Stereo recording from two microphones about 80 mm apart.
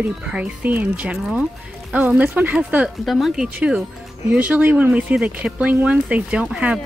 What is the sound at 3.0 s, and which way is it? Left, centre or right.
Speech, centre.